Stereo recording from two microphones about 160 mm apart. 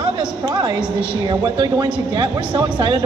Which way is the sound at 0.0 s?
25° right (ahead or behind).